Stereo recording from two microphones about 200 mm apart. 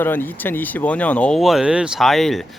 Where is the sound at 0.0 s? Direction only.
10° left (ahead or behind).